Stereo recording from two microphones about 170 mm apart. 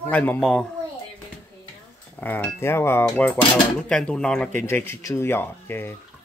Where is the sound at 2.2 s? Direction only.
10° left (ahead or behind).